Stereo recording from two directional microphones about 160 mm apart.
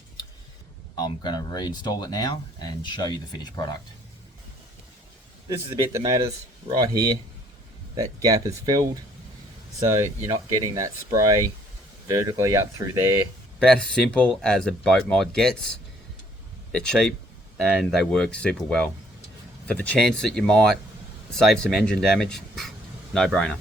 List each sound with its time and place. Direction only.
0.9 s speech: 25° left (ahead or behind)
5.9 s speech: 20° right (ahead or behind)
10.5 s speech: 20° right (ahead or behind)
13.6 s speech: 5° left (ahead or behind)